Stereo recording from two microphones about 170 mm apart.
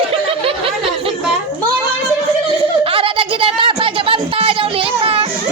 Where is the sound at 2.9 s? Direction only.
30° right (ahead or behind).